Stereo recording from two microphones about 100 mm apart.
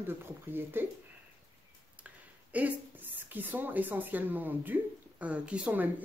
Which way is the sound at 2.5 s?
15° right (ahead or behind).